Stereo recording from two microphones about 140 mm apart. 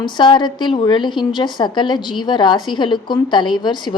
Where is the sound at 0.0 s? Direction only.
35° left (ahead or behind).